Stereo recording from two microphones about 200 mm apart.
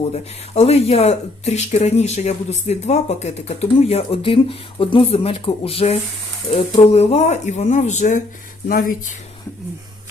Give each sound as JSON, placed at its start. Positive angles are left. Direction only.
{"t": 0.1, "sound": "speech", "side_deg": 30}